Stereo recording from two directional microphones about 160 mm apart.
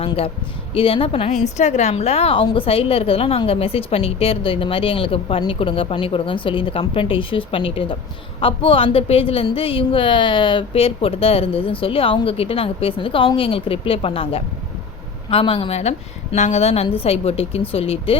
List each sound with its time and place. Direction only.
0.7 s a woman's voice: 35° left (ahead or behind)